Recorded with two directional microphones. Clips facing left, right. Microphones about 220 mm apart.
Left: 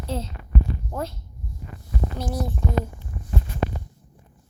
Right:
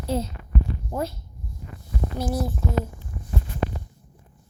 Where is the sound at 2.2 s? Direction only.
5° right (ahead or behind).